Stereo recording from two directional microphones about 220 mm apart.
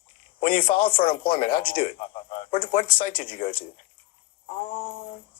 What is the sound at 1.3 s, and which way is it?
Speech, 40° left (ahead or behind).